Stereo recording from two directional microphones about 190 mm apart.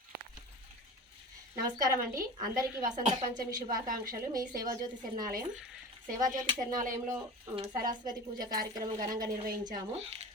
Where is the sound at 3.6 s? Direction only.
45° right (ahead or behind).